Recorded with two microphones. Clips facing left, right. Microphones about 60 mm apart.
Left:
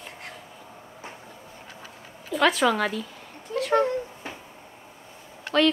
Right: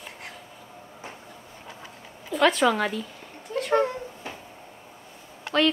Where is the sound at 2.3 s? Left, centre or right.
Centre.